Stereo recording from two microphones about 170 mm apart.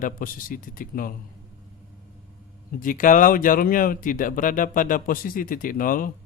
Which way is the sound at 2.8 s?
50° left (ahead or behind).